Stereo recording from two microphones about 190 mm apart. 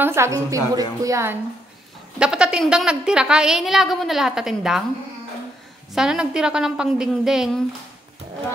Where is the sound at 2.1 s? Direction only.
5° right (ahead or behind).